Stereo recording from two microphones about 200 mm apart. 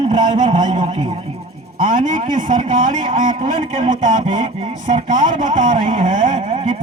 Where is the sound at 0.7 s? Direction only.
35° right (ahead or behind).